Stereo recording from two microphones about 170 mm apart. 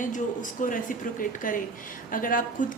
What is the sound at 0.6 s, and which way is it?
A woman's voice, 50° left (ahead or behind).